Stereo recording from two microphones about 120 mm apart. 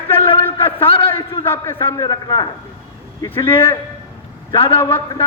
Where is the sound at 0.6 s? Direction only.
50° left (ahead or behind).